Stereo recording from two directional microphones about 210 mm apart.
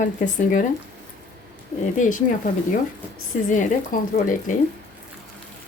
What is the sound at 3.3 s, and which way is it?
Speech, 40° left (ahead or behind).